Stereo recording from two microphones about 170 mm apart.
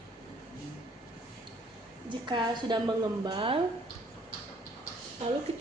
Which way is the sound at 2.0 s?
25° right (ahead or behind).